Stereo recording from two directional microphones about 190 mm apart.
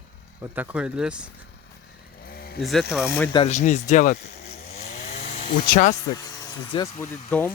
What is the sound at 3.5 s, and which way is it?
Speech, 40° left (ahead or behind).